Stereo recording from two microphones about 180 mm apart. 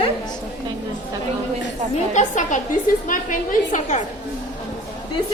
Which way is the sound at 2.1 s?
45° left (ahead or behind).